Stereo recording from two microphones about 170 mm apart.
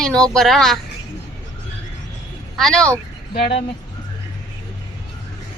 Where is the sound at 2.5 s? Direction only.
5° left (ahead or behind).